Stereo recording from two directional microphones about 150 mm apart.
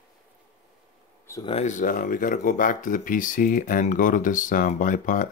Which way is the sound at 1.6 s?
60° left (ahead or behind).